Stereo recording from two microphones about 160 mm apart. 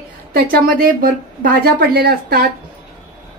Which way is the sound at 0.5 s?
65° right (ahead or behind).